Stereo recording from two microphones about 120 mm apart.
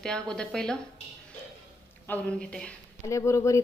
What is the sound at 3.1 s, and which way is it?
Speech, 25° left (ahead or behind).